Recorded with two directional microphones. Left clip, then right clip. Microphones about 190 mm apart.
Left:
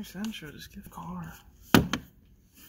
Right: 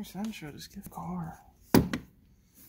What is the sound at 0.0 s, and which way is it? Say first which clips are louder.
Speech: left 1 dB; 50° right (ahead or behind).